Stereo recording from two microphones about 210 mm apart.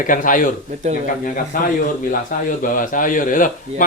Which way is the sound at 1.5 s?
40° left (ahead or behind).